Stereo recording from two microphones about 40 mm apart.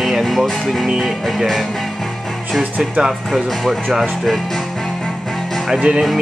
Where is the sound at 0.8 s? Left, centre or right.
Centre.